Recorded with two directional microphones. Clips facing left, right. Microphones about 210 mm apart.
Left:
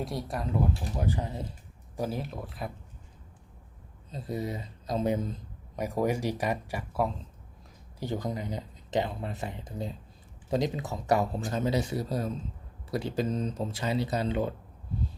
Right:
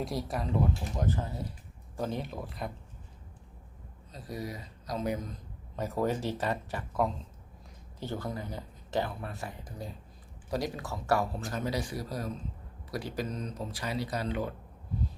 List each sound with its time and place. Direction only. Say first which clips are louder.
0.0 s speech: even; centre (ahead or behind)
1.0 s speech: left 1 dB; 15° left (ahead or behind)
2.0 s speech: left 1 dB; 5° left (ahead or behind)
4.1 s speech: left 5 dB; 25° left (ahead or behind)
5.7 s speech: left 2 dB; 15° left (ahead or behind)